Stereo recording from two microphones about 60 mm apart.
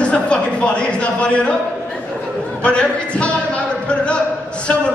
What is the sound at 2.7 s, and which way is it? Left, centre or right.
Speech, centre.